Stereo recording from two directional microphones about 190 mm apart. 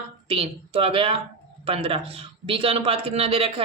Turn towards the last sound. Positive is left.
turn(degrees=-30)  # may be behind; listen again after turning